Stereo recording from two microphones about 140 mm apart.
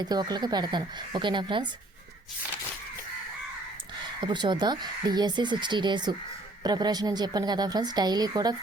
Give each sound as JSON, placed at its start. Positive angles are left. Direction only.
{"t": 0.0, "sound": "speech", "side_deg": -30}
{"t": 4.0, "sound": "a woman's voice", "side_deg": -35}